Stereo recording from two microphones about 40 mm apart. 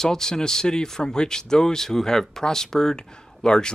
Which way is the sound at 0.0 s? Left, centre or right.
Centre.